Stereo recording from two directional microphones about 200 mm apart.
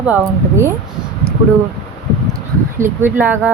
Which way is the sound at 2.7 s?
10° right (ahead or behind).